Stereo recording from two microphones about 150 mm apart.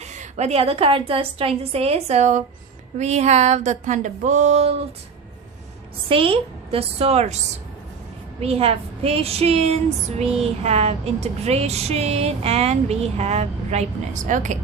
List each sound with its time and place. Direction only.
0.0 s a woman's voice: 50° right (ahead or behind)
6.1 s a woman's voice: 35° right (ahead or behind)
8.4 s a woman's voice: 40° right (ahead or behind)